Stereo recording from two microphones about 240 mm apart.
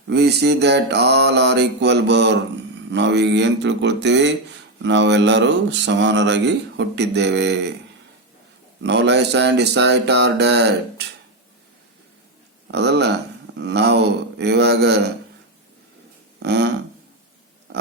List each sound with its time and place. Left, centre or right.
0.1 s speech: right
8.8 s speech: right
12.7 s speech: right
16.4 s speech: right